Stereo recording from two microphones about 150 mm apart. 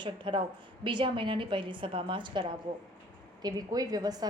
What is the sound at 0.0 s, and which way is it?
A woman's voice, 30° right (ahead or behind).